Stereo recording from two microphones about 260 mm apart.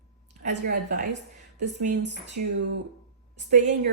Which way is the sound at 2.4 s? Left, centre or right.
Right.